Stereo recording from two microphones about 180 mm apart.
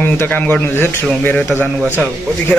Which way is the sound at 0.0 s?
10° left (ahead or behind).